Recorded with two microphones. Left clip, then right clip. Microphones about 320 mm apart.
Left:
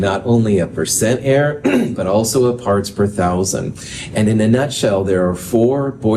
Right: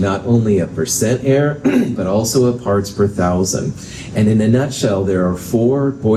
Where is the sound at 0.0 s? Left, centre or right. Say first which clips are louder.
Left 1 dB; left.